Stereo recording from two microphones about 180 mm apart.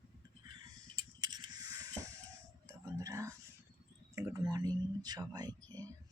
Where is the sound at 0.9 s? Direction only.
25° right (ahead or behind).